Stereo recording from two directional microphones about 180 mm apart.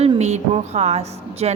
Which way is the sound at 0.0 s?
40° right (ahead or behind).